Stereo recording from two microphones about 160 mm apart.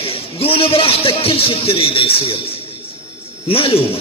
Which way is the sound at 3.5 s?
35° left (ahead or behind).